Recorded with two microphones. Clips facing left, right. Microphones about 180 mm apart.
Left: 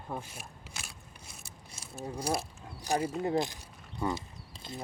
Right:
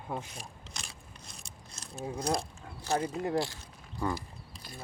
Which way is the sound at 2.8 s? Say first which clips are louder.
Left 1 dB; 15° left (ahead or behind).